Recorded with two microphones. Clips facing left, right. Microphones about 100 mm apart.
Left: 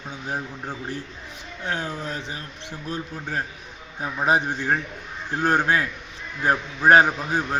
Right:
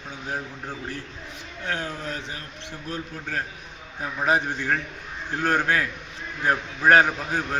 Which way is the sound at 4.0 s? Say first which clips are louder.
Left 2 dB; 20° left (ahead or behind).